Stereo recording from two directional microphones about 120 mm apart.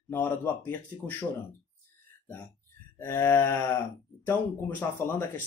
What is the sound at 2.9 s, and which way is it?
Speech, 20° left (ahead or behind).